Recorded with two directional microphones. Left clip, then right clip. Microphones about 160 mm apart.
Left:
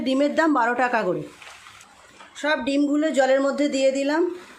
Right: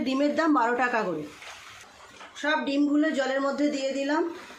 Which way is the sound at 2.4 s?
50° left (ahead or behind).